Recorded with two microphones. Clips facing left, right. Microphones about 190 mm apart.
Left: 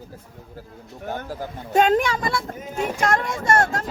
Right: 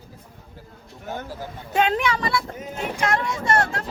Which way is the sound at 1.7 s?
45° left (ahead or behind).